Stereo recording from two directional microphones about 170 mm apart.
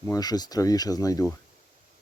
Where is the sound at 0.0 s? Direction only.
20° left (ahead or behind).